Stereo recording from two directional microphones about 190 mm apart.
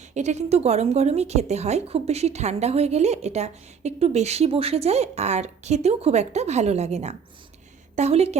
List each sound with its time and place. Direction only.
0.1 s a woman's voice: 35° right (ahead or behind)